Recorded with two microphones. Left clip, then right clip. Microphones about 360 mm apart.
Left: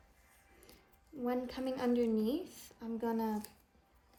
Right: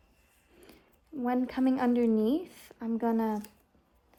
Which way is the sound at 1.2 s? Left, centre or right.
Right.